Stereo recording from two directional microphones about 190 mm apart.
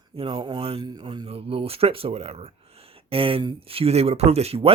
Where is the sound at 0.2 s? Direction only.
30° right (ahead or behind).